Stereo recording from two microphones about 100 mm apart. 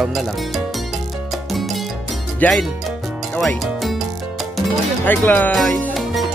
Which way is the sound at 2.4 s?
15° left (ahead or behind).